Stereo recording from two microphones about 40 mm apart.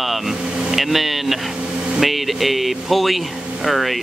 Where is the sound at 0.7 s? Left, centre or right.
Centre.